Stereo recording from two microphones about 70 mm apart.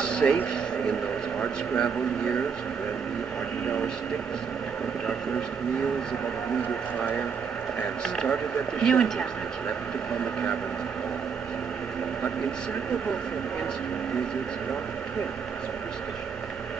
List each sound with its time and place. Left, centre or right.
0.0 s vehicle: centre
1.4 s speech: centre
7.0 s speech: centre